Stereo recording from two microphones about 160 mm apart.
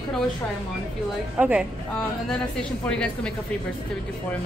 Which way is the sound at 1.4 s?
10° right (ahead or behind).